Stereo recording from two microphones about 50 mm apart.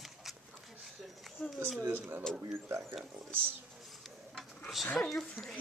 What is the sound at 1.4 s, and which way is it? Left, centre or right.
Speech, centre.